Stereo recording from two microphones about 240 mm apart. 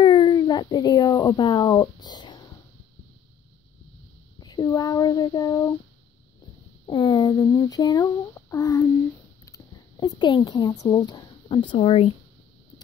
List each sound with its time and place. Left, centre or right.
0.0 s speech: centre
4.4 s speech: centre
6.9 s speech: centre